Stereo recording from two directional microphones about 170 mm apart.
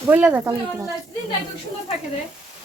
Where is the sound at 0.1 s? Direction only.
10° right (ahead or behind).